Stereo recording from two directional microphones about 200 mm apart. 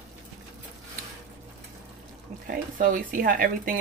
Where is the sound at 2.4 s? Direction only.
45° right (ahead or behind).